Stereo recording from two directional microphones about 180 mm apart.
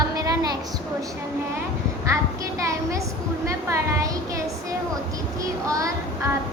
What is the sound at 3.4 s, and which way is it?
Speech, 15° right (ahead or behind).